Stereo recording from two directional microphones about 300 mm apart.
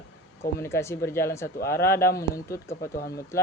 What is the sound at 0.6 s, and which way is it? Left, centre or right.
Speech, centre.